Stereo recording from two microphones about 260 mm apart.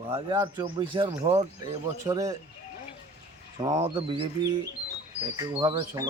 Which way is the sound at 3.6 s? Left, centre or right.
Centre.